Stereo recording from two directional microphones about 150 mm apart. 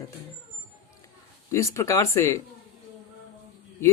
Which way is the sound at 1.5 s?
20° left (ahead or behind).